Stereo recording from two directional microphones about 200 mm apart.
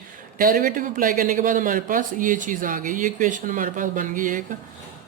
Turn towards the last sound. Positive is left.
turn(degrees=-40)  # may be behind; listen again after turning